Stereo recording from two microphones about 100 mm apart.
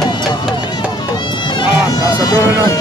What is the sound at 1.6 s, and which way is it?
Music, 40° left (ahead or behind).